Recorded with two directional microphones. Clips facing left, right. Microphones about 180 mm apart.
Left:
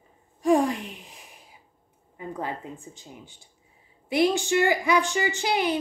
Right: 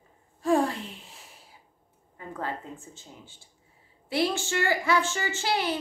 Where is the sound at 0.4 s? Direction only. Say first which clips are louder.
Left 3 dB; 15° left (ahead or behind).